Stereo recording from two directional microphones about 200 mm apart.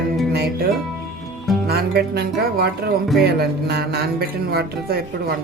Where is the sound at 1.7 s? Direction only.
50° right (ahead or behind).